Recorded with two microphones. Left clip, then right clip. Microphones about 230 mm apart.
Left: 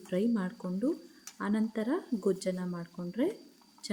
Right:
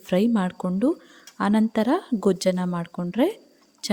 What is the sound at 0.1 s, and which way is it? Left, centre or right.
Speech, right.